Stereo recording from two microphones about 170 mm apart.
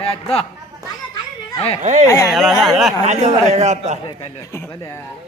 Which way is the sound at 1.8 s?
45° right (ahead or behind).